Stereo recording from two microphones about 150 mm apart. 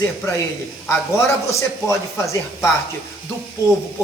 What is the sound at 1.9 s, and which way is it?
Speech, 20° left (ahead or behind).